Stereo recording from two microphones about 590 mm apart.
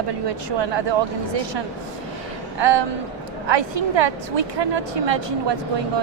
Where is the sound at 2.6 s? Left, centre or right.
Right.